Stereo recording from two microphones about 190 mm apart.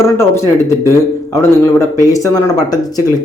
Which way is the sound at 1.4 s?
15° left (ahead or behind).